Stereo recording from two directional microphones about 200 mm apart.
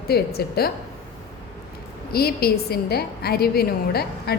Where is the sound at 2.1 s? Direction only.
50° left (ahead or behind).